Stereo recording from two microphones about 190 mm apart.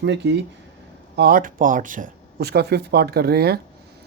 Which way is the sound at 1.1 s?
50° right (ahead or behind).